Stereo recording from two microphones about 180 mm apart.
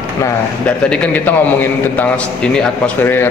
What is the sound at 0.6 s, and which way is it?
A man's voice, 5° left (ahead or behind).